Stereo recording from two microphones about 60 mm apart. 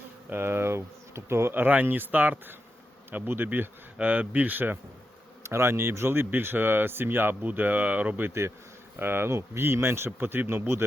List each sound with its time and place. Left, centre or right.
0.3 s speech: right
1.6 s speech: right
3.9 s speech: right
5.4 s speech: right
8.3 s speech: right
9.0 s speech: right